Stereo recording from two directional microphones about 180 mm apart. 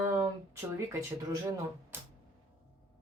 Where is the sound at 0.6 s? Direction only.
15° right (ahead or behind).